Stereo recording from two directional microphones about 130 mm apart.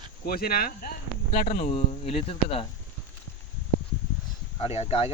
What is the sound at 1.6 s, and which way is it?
Speech, 45° left (ahead or behind).